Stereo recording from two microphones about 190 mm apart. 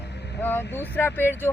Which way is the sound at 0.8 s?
10° left (ahead or behind).